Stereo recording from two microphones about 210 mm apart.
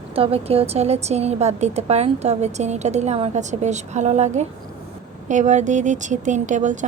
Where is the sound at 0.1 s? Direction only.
30° right (ahead or behind).